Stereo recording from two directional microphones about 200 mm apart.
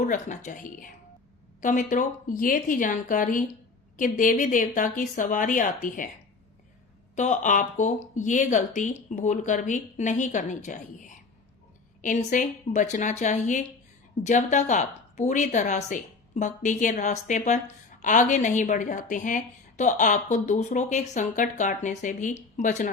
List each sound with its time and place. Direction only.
0.0 s a woman's voice: 40° left (ahead or behind)
7.2 s a woman's voice: 40° left (ahead or behind)